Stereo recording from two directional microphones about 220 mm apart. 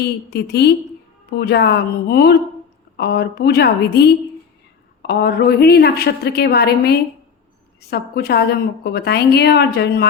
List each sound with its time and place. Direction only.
0.0 s a woman's voice: 50° left (ahead or behind)